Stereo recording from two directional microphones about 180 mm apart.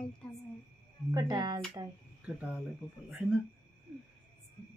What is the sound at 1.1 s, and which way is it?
Speech, 20° right (ahead or behind).